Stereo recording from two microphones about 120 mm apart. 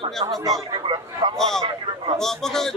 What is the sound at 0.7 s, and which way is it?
Speech, 40° right (ahead or behind).